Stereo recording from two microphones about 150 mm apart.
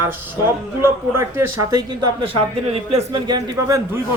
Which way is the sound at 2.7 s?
40° right (ahead or behind).